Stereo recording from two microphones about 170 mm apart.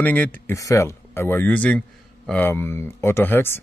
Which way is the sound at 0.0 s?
10° left (ahead or behind).